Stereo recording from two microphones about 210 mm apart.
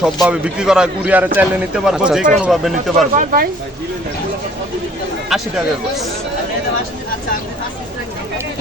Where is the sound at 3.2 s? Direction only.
45° right (ahead or behind).